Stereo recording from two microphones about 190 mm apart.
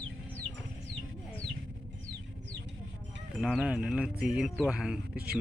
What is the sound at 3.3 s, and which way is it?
Speech, centre (ahead or behind).